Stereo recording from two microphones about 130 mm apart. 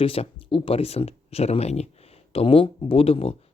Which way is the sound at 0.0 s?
45° left (ahead or behind).